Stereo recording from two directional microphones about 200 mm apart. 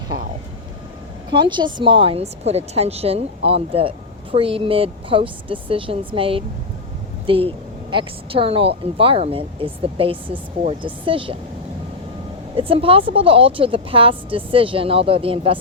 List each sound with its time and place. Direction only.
1.3 s a woman's voice: 25° right (ahead or behind)
12.5 s a woman's voice: 25° right (ahead or behind)